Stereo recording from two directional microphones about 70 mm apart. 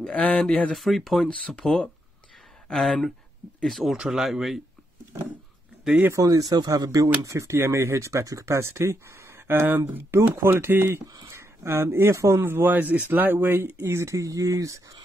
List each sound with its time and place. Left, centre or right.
0.0 s speech: centre
0.7 s speech: centre
6.1 s speech: right
14.1 s speech: right